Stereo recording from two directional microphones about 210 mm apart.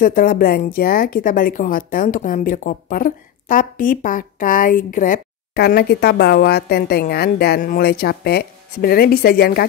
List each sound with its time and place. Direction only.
0.0 s speech: 45° left (ahead or behind)